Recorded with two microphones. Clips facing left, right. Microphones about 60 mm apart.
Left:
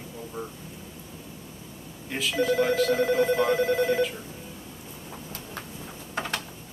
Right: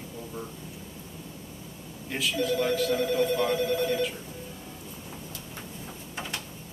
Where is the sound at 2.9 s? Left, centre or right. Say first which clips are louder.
Left 3 dB; left.